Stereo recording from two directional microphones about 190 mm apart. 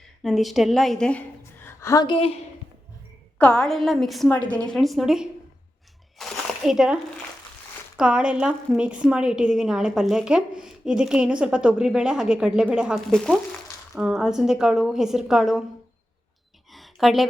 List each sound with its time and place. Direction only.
0.2 s a woman's voice: centre (ahead or behind)
1.6 s a woman's voice: 15° left (ahead or behind)
3.3 s a woman's voice: 5° left (ahead or behind)
6.1 s a sound: centre (ahead or behind)
7.9 s a woman's voice: 5° right (ahead or behind)
16.7 s a sound: centre (ahead or behind)